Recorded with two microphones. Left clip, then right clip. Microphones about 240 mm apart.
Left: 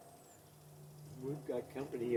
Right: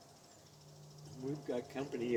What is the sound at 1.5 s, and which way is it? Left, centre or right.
Speech, right.